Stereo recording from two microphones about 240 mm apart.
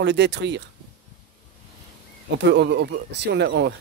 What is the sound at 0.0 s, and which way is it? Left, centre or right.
Speech, right.